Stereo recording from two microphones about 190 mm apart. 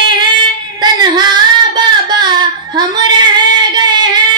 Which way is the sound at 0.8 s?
20° right (ahead or behind).